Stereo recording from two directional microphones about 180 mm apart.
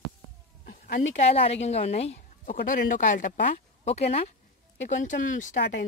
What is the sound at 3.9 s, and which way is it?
A woman's voice, 35° left (ahead or behind).